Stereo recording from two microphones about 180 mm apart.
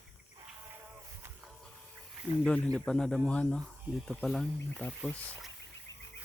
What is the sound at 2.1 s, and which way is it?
Wild animals, 5° right (ahead or behind).